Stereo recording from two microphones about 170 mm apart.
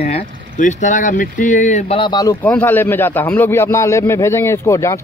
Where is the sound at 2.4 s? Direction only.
10° left (ahead or behind).